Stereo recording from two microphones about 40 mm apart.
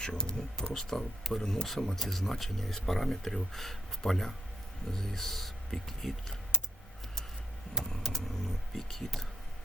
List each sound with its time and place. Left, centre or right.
0.0 s speech: centre
1.2 s speech: centre
7.9 s vehicle: centre